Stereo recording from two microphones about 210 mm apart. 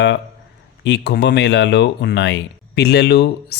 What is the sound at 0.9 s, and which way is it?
Speech, 55° left (ahead or behind).